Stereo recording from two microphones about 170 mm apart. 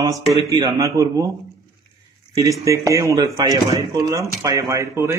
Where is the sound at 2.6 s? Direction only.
20° right (ahead or behind).